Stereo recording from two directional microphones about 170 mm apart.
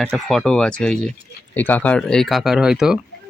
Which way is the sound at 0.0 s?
Centre (ahead or behind).